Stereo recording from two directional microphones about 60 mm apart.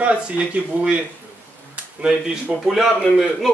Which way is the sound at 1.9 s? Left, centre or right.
Centre.